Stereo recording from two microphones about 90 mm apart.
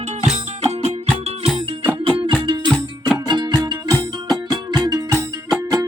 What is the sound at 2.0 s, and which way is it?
Music, 75° right (ahead or behind).